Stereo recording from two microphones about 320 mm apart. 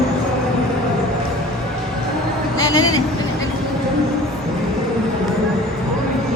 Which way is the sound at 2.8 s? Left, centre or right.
Left.